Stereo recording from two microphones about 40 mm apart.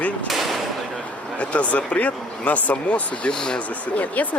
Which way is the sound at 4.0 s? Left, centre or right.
Left.